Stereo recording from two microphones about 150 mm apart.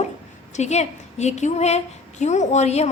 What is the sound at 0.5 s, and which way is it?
A woman's voice, 50° left (ahead or behind).